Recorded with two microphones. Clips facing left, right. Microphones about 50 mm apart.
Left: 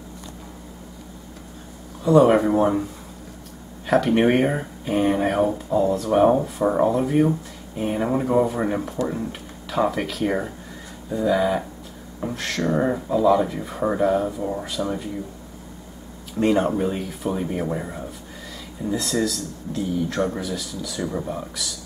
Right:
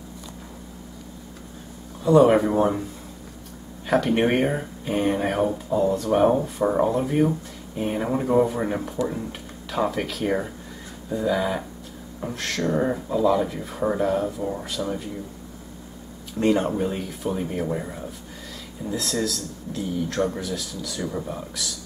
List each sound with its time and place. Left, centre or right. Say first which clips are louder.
2.0 s speech: left 1 dB; centre
3.8 s speech: left 3 dB; centre
16.3 s speech: left 2 dB; centre